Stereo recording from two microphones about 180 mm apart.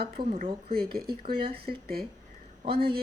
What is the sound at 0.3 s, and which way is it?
A woman's voice, 50° right (ahead or behind).